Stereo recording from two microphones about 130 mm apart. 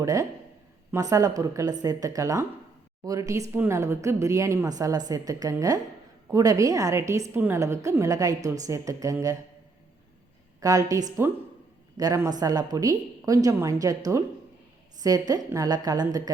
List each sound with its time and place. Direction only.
0.0 s a woman's voice: 25° right (ahead or behind)
10.6 s a woman's voice: 25° right (ahead or behind)